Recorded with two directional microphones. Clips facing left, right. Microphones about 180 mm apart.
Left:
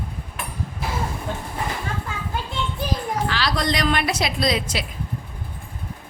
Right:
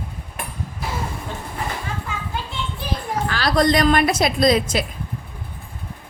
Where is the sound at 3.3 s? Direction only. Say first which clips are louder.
Right 9 dB; 50° right (ahead or behind).